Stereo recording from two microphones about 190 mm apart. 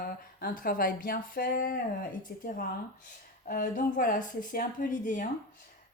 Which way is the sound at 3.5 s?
45° left (ahead or behind).